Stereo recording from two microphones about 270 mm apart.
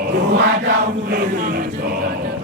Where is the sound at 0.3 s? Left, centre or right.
Right.